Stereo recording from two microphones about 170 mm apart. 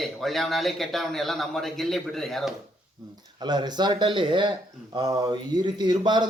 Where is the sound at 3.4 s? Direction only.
25° right (ahead or behind).